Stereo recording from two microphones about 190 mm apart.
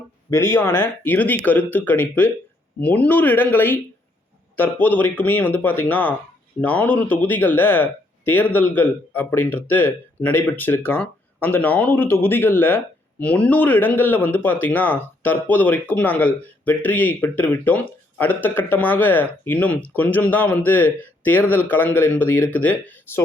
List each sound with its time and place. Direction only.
0.3 s speech: 15° left (ahead or behind)